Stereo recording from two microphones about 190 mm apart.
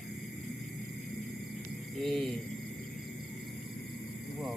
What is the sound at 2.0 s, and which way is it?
Speech, centre (ahead or behind).